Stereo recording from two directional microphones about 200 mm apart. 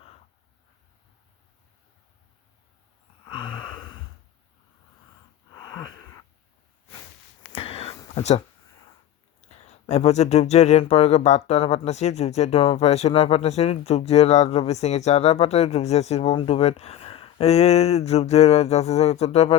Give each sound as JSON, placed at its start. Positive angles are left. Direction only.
{"t": 3.2, "sound": "wheeze", "side_deg": 20}
{"t": 5.5, "sound": "wheeze", "side_deg": 20}
{"t": 7.4, "sound": "a sound", "side_deg": 30}
{"t": 8.1, "sound": "speech", "side_deg": 35}
{"t": 9.6, "sound": "speech", "side_deg": 35}